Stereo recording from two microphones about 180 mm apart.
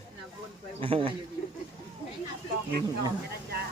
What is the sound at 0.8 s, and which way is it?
Speech, 30° right (ahead or behind).